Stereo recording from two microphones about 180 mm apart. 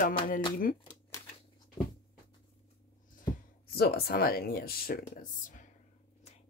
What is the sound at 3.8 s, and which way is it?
Speech, 60° left (ahead or behind).